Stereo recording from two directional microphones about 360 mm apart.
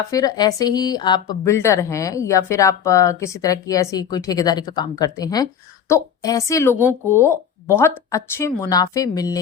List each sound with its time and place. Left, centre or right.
0.1 s a woman's voice: centre
6.7 s speech: centre
7.1 s a woman's voice: centre